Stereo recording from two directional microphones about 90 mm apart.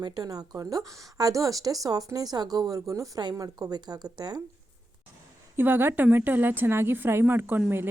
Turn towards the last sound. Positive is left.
turn(degrees=-20)  # may be behind; listen again after turning